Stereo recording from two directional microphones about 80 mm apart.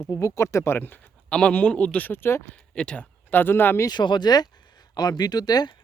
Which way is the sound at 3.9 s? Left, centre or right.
Left.